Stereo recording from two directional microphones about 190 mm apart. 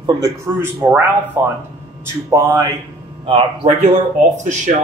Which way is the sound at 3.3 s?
30° right (ahead or behind).